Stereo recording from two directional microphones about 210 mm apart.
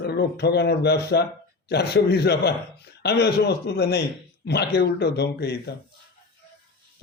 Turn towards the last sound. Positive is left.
turn(degrees=50)  # may be behind; listen again after turning